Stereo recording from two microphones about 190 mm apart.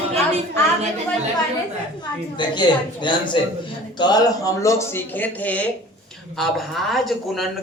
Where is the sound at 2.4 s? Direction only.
25° left (ahead or behind).